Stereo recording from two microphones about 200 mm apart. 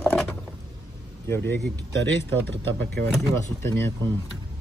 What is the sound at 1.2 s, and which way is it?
Speech, 10° left (ahead or behind).